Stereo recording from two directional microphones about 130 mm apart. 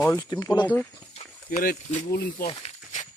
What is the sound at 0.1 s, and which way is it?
Speech, 30° left (ahead or behind).